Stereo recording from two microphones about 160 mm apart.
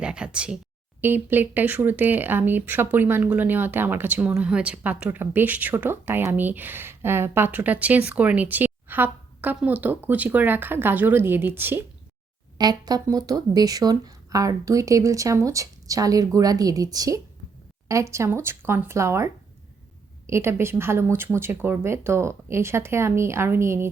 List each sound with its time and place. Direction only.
0.0 s a sound: 5° right (ahead or behind)
1.0 s speech: 10° right (ahead or behind)
12.5 s speech: 25° right (ahead or behind)